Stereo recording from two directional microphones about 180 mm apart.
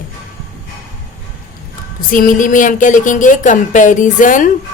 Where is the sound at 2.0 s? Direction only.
50° left (ahead or behind).